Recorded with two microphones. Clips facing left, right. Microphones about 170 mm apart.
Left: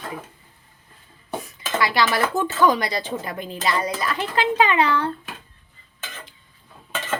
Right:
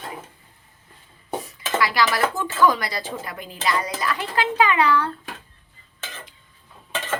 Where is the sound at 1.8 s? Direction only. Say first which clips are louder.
Left 1 dB; 25° left (ahead or behind).